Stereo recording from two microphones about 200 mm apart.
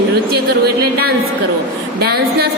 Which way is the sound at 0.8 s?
50° right (ahead or behind).